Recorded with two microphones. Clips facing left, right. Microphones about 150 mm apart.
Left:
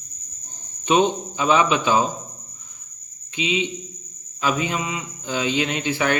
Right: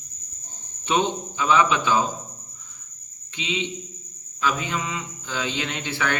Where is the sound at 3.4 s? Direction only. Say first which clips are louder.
Left 5 dB; 15° left (ahead or behind).